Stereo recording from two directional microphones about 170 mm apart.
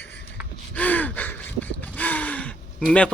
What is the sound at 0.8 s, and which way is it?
Gasp, 10° left (ahead or behind).